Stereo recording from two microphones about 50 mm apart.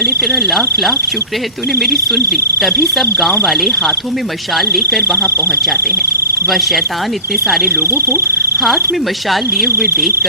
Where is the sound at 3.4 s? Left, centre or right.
Centre.